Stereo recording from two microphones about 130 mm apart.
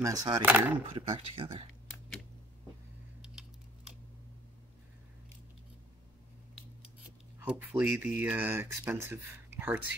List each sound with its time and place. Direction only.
0.0 s speech: 30° right (ahead or behind)
0.4 s speech: 15° right (ahead or behind)
0.9 s speech: 45° right (ahead or behind)
3.2 s a sound: 5° right (ahead or behind)
7.3 s speech: 15° right (ahead or behind)